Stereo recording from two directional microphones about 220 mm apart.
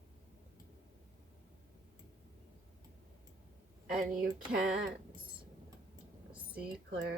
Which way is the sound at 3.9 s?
40° right (ahead or behind).